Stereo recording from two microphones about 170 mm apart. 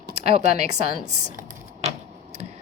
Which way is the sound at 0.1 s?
40° right (ahead or behind).